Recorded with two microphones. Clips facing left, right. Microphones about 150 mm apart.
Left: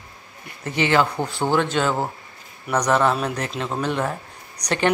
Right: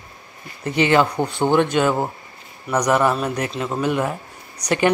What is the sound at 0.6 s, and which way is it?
A man's voice, 20° right (ahead or behind).